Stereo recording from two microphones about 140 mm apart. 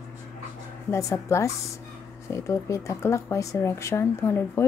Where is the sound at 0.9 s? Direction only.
20° left (ahead or behind).